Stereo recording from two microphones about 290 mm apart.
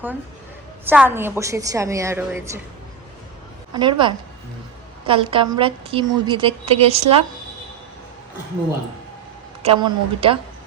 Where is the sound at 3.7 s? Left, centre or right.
Centre.